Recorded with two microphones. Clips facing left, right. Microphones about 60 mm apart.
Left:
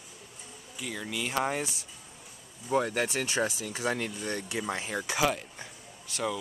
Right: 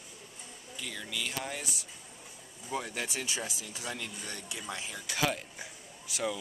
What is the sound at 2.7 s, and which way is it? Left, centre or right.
Speech, left.